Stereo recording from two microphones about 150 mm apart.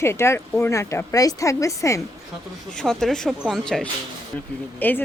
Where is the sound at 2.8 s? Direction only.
5° left (ahead or behind).